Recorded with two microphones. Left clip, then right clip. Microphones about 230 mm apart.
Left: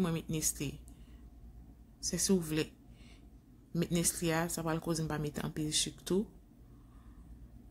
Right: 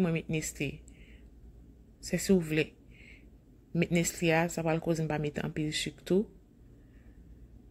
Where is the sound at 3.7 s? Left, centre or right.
Centre.